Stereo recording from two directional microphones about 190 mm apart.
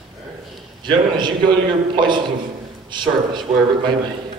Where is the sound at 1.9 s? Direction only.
25° right (ahead or behind).